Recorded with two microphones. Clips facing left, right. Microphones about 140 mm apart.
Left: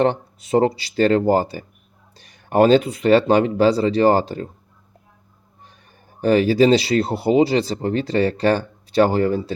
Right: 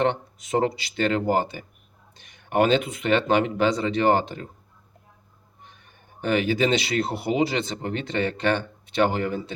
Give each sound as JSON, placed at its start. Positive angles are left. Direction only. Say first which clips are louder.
{"t": 0.0, "sound": "speech", "louder": "left 5 dB", "side_deg": 35}
{"t": 6.2, "sound": "speech", "louder": "left 8 dB", "side_deg": 35}